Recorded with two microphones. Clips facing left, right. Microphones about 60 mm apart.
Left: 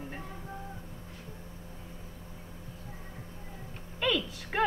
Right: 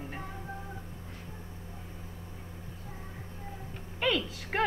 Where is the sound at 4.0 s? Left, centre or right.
Right.